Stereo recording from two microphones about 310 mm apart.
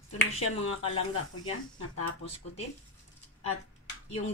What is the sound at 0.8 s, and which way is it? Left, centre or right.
Speech, centre.